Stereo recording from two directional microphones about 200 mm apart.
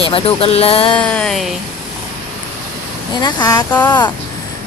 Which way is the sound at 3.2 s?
20° left (ahead or behind).